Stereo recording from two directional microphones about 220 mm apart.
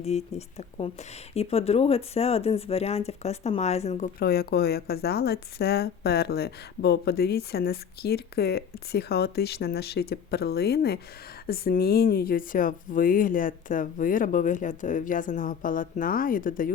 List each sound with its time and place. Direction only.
0.0 s a woman's voice: 30° left (ahead or behind)